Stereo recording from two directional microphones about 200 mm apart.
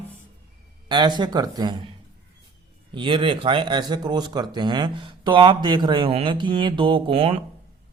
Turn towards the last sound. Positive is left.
turn(degrees=-30)  # may be behind; listen again after turning